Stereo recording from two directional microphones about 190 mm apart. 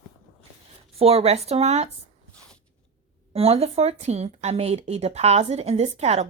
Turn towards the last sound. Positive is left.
turn(degrees=-35)  # may be behind; listen again after turning